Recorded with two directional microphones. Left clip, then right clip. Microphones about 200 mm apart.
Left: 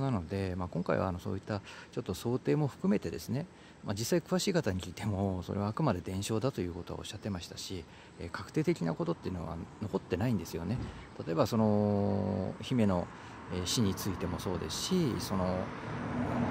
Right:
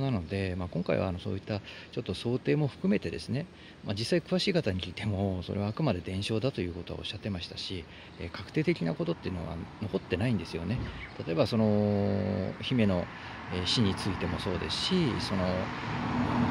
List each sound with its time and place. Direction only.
0.0 s speech: 5° left (ahead or behind)
15.9 s vehicle: 45° right (ahead or behind)